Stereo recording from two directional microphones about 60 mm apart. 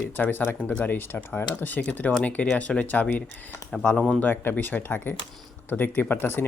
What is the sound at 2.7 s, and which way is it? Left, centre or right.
Speech, centre.